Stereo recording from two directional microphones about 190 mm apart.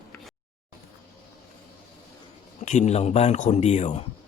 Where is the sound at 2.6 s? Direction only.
40° left (ahead or behind).